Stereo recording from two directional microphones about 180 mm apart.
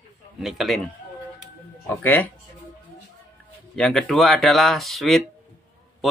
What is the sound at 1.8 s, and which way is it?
Speech, 10° left (ahead or behind).